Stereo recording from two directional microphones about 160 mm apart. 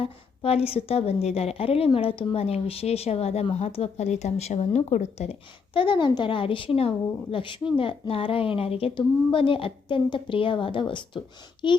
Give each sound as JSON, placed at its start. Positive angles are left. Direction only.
{"t": 0.0, "sound": "a woman's voice", "side_deg": 35}